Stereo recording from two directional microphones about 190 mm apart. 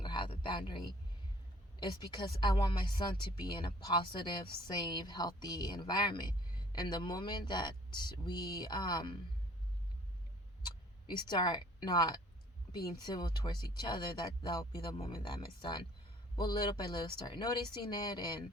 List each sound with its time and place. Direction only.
0.0 s a sound: 25° left (ahead or behind)
1.8 s speech: 25° left (ahead or behind)
11.1 s speech: 25° left (ahead or behind)